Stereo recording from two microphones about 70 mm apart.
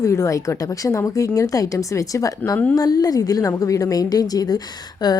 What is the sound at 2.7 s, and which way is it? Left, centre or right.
Speech, left.